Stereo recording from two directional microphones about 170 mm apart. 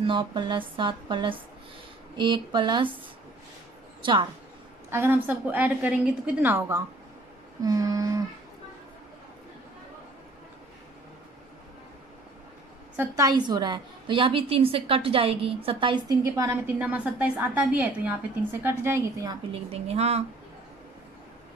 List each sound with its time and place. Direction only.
0.0 s a woman's voice: 30° right (ahead or behind)
4.0 s a woman's voice: 30° right (ahead or behind)
4.9 s a woman's voice: 10° right (ahead or behind)
12.9 s a woman's voice: 15° right (ahead or behind)
16.3 s a woman's voice: 15° right (ahead or behind)
19.5 s a woman's voice: 35° right (ahead or behind)